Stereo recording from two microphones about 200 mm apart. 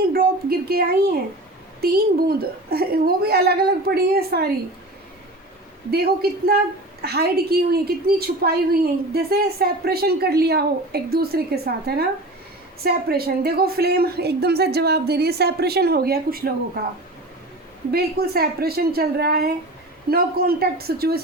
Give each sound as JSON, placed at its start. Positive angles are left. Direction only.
{"t": 0.1, "sound": "a woman's voice", "side_deg": -50}
{"t": 5.9, "sound": "a woman's voice", "side_deg": -50}
{"t": 17.9, "sound": "a woman's voice", "side_deg": -50}